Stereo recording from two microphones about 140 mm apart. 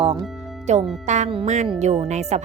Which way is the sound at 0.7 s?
55° right (ahead or behind).